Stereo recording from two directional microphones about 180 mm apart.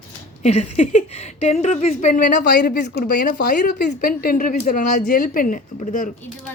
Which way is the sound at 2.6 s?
60° left (ahead or behind).